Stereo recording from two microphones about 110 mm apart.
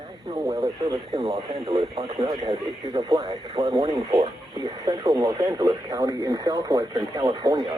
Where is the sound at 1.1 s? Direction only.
60° right (ahead or behind).